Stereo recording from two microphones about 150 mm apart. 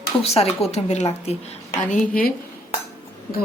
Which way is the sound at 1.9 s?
60° left (ahead or behind).